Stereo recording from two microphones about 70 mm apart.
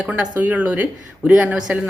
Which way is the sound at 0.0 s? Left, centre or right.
Right.